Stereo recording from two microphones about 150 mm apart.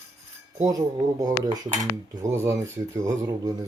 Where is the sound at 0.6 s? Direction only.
25° right (ahead or behind).